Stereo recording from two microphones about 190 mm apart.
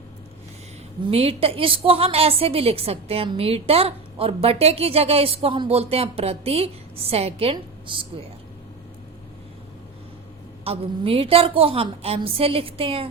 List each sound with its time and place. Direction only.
1.0 s a woman's voice: 30° right (ahead or behind)
10.6 s a woman's voice: 30° right (ahead or behind)